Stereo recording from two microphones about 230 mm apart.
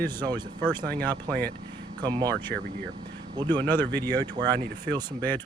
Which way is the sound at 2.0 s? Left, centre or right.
Centre.